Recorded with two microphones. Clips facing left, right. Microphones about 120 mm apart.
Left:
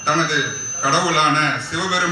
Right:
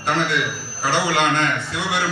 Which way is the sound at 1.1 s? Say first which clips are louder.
Left 1 dB; 40° right (ahead or behind).